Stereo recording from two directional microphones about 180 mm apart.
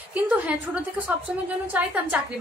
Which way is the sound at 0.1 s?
10° right (ahead or behind).